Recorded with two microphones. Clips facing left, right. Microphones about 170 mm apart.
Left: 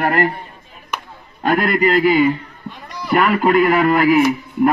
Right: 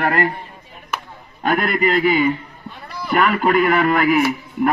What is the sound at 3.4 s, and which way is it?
Speech, 40° left (ahead or behind).